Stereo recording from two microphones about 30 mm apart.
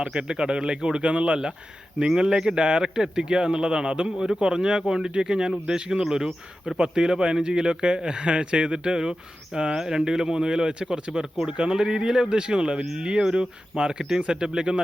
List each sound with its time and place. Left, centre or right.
0.0 s speech: right
2.1 s speech: right
9.7 s speech: centre; by 14.8 s right